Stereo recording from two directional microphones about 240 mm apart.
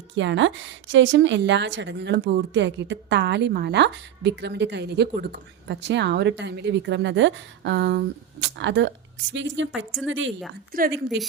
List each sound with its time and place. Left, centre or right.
0.2 s a woman's voice: right
10.7 s a woman's voice: right